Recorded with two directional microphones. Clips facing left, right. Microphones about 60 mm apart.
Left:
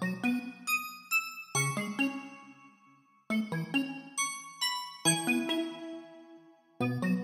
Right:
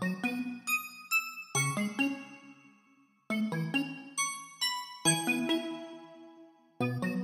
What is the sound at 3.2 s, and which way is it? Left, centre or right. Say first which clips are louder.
Music: even; centre.